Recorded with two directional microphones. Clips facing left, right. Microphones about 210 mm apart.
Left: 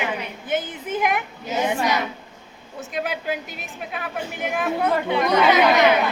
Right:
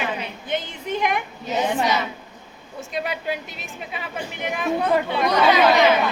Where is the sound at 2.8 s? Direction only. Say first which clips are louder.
Even; centre (ahead or behind).